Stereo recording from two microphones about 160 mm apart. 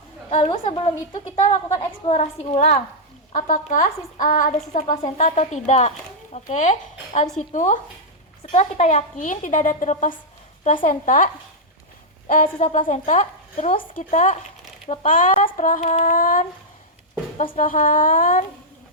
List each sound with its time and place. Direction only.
0.3 s a woman's voice: 40° left (ahead or behind)
12.3 s a woman's voice: 50° left (ahead or behind)